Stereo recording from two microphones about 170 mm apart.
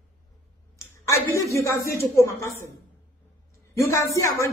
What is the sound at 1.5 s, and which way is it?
Speech, 15° left (ahead or behind).